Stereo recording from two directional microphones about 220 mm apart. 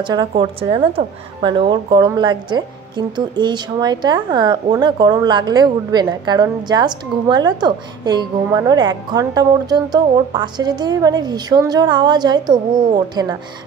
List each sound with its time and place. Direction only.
0.0 s a woman's voice: 20° right (ahead or behind)